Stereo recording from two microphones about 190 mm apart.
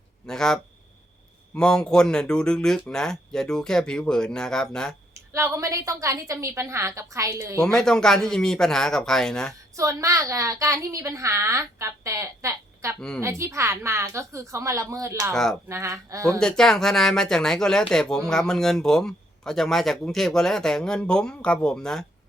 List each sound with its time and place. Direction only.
0.3 s speech: 5° left (ahead or behind)
5.1 s a woman's voice: 15° right (ahead or behind)
7.6 s speech: centre (ahead or behind)
9.7 s a woman's voice: 15° right (ahead or behind)
15.3 s speech: centre (ahead or behind)
15.7 s a woman's voice: 15° right (ahead or behind)
16.4 s speech: 5° left (ahead or behind)